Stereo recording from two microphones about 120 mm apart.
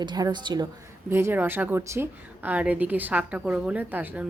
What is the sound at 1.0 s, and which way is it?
A woman's voice, 20° right (ahead or behind).